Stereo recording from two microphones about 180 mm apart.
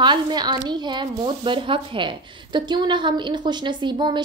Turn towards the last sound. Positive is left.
turn(degrees=-25)  # may be behind; listen again after turning